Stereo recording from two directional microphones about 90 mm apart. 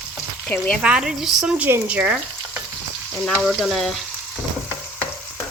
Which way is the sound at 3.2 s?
Centre (ahead or behind).